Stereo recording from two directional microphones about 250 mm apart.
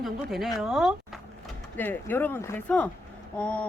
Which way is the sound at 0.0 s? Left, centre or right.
Centre.